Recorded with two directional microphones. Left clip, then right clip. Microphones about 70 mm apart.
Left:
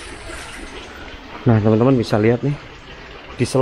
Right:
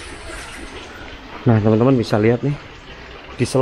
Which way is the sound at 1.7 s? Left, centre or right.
Centre.